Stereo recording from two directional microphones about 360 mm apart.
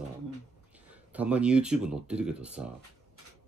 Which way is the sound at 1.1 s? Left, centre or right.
Centre.